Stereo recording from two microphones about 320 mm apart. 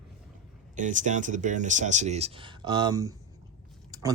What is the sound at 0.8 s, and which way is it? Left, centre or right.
Speech, right.